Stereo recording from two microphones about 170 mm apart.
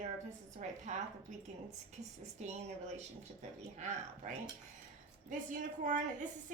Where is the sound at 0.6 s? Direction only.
45° right (ahead or behind).